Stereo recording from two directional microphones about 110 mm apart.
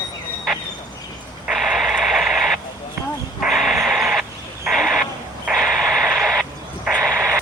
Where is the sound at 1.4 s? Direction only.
5° right (ahead or behind).